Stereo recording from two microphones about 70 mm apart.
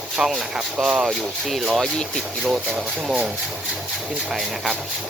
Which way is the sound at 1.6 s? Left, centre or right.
Centre.